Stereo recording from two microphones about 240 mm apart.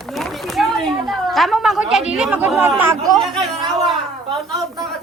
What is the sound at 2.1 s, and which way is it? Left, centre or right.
Speech, centre.